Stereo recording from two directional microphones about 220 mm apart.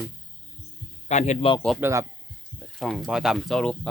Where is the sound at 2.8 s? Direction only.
Centre (ahead or behind).